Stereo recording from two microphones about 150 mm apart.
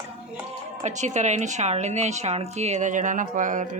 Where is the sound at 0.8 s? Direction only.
50° right (ahead or behind).